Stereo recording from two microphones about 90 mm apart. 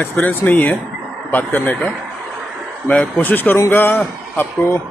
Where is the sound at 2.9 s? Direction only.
20° left (ahead or behind).